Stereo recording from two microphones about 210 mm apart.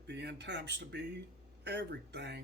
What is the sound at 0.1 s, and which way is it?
Speech, 55° right (ahead or behind).